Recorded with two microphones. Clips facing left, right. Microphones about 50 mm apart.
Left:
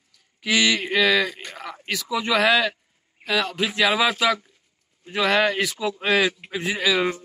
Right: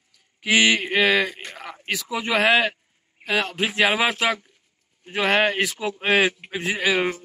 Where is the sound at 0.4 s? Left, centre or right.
Right.